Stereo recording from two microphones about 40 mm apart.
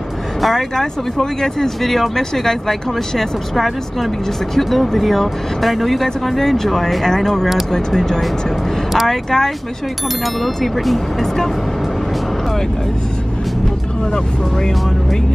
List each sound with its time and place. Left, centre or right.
0.4 s speech: centre